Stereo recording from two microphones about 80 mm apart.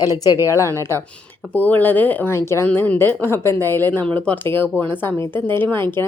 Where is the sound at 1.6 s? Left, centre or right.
Left.